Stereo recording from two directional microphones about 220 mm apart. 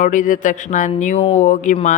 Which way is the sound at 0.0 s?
35° left (ahead or behind).